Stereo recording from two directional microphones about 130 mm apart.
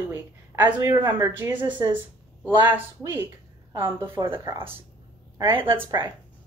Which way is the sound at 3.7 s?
20° right (ahead or behind).